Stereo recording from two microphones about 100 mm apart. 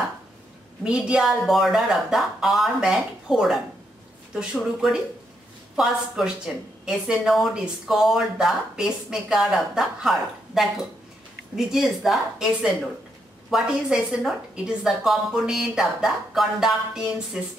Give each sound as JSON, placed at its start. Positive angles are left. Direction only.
{"t": 0.8, "sound": "a woman's voice", "side_deg": -10}